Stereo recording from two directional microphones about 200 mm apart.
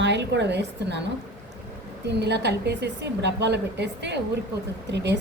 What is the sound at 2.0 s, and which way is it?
A woman's voice, 55° right (ahead or behind).